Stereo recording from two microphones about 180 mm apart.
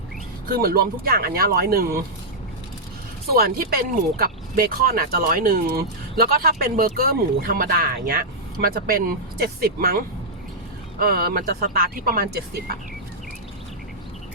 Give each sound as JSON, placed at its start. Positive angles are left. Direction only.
{"t": 0.4, "sound": "speech", "side_deg": -55}
{"t": 3.3, "sound": "speech", "side_deg": -55}
{"t": 11.0, "sound": "speech", "side_deg": -55}